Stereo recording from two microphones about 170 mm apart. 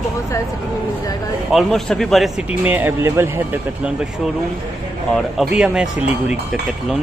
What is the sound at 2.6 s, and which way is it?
Speech, 10° right (ahead or behind).